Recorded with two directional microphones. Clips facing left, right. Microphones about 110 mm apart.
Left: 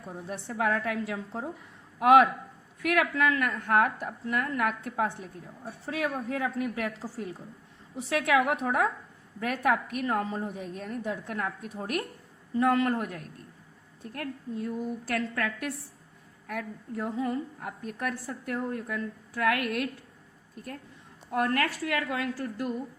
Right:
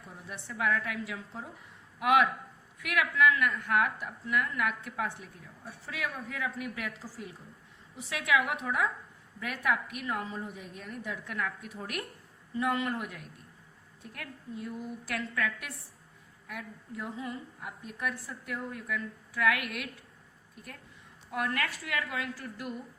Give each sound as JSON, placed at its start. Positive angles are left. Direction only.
{"t": 0.0, "sound": "a woman's voice", "side_deg": 40}
{"t": 12.5, "sound": "a man's voice", "side_deg": 40}
{"t": 21.2, "sound": "a woman's voice", "side_deg": 40}